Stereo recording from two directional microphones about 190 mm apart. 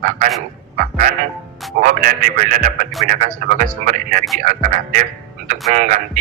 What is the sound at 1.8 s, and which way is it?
A man's voice, 45° right (ahead or behind).